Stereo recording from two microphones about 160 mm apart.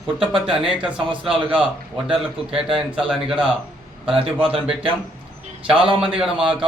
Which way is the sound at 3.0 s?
Centre (ahead or behind).